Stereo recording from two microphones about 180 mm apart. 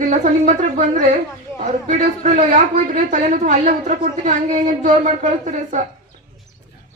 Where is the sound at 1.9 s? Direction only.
45° right (ahead or behind).